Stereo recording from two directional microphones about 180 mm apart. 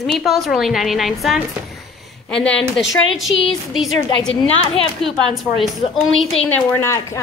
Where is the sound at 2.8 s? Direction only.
90° left.